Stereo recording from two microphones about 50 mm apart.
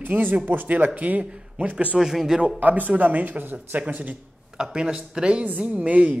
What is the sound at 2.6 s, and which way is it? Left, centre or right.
A woman's voice, right.